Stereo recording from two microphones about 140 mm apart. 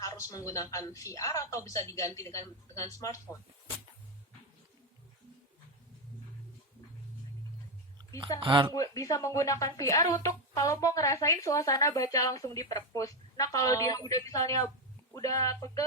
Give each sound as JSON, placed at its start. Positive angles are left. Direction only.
{"t": 0.0, "sound": "speech", "side_deg": 25}
{"t": 8.4, "sound": "speech", "side_deg": -35}
{"t": 8.7, "sound": "speech", "side_deg": 25}